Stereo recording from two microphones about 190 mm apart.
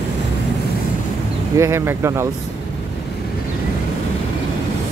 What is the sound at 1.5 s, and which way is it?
Speech, 15° right (ahead or behind).